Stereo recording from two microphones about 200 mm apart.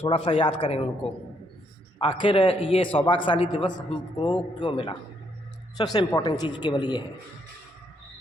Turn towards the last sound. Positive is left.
turn(degrees=20)  # may be behind; listen again after turning